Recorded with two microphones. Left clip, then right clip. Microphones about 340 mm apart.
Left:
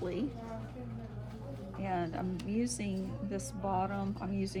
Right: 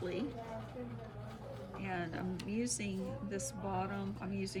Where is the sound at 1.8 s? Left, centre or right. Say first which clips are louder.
Left 5 dB; centre.